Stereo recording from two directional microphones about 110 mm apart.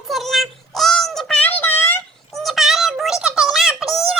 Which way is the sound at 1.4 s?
15° left (ahead or behind).